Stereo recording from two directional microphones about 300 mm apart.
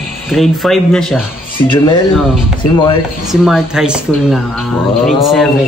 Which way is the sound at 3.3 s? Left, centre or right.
Centre.